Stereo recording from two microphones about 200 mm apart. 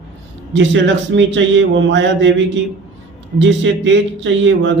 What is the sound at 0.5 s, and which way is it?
A man's voice, 65° right (ahead or behind).